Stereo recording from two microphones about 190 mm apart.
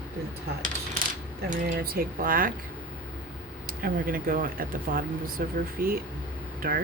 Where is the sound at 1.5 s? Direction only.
50° right (ahead or behind).